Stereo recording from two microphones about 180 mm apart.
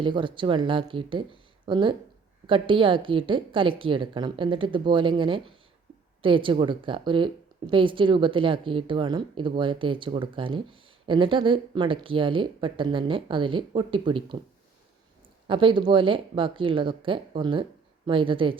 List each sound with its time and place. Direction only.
0.0 s speech: 25° right (ahead or behind)
15.4 s speech: 25° right (ahead or behind)